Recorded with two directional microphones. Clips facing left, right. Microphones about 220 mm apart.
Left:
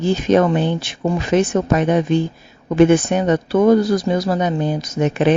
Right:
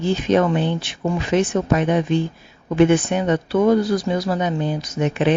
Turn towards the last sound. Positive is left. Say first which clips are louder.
# left 3 dB
turn(degrees=45)  # may be behind; listen again after turning